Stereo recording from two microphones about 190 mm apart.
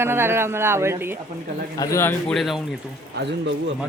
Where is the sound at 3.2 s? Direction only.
70° right (ahead or behind).